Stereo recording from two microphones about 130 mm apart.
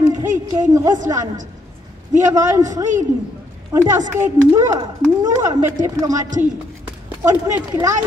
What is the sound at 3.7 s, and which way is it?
Speech, 25° right (ahead or behind).